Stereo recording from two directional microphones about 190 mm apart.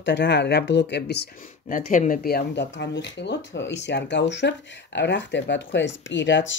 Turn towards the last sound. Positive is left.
turn(degrees=70)  # may be behind; listen again after turning